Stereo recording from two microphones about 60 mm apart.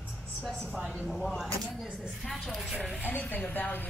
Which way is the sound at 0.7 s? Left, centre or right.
Centre.